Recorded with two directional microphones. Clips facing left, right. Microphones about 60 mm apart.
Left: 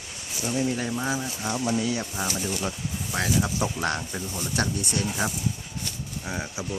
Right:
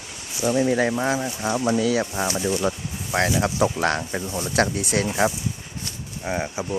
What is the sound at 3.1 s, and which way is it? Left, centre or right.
Speech, right.